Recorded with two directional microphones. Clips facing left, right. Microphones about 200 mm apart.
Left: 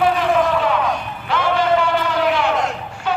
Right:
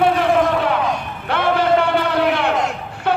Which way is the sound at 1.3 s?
60° right (ahead or behind).